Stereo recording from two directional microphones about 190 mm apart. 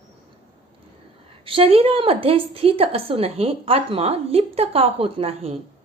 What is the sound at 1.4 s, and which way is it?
A woman's voice, 30° right (ahead or behind).